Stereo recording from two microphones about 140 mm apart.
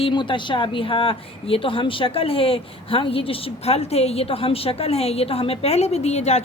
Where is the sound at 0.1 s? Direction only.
35° left (ahead or behind).